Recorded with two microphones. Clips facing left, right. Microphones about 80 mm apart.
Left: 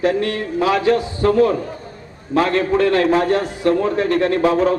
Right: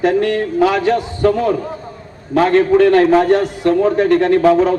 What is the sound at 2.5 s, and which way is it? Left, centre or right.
Speech, right.